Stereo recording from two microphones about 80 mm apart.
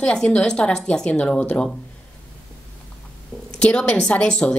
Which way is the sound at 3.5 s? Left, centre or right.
Centre.